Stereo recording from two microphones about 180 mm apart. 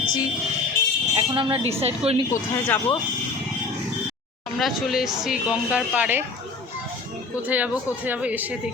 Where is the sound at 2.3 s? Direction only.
10° left (ahead or behind).